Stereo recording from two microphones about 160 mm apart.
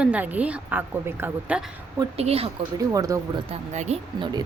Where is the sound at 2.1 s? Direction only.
40° right (ahead or behind).